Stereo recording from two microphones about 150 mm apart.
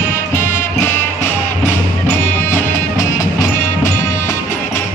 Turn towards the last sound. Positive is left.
turn(degrees=15)  # may be behind; listen again after turning